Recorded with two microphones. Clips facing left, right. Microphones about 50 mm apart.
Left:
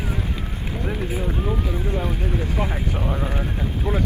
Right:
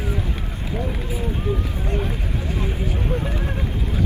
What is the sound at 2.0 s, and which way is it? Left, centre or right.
Speech, left.